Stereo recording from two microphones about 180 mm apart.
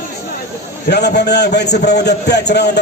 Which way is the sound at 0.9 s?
65° left (ahead or behind).